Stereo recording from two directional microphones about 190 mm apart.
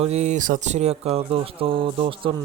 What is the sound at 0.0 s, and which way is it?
Speech, 35° right (ahead or behind).